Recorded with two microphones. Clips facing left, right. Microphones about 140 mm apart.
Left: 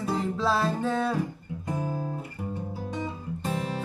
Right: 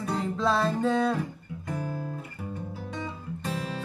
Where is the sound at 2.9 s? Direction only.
20° left (ahead or behind).